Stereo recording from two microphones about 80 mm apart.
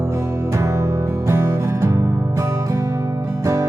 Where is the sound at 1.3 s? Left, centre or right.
Right.